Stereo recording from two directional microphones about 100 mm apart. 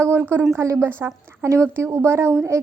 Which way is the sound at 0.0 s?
25° right (ahead or behind).